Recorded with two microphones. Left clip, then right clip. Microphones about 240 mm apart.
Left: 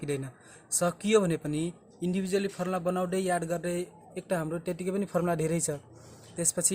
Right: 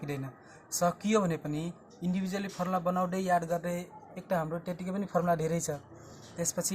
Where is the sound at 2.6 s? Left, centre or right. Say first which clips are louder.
Even; left.